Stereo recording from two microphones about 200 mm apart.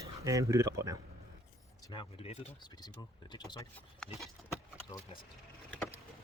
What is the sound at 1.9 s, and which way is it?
Speech, 25° left (ahead or behind).